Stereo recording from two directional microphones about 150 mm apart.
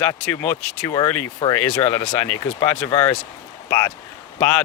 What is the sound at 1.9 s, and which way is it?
Speech, 30° left (ahead or behind).